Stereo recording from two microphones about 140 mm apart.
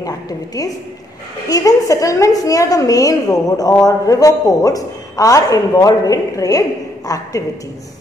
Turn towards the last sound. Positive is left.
turn(degrees=25)  # may be behind; listen again after turning